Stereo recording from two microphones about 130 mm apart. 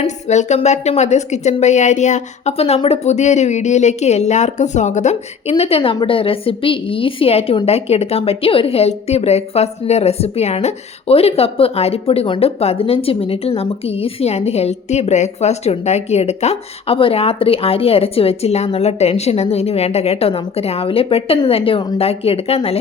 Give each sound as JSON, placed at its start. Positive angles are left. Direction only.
{"t": 0.0, "sound": "speech", "side_deg": 60}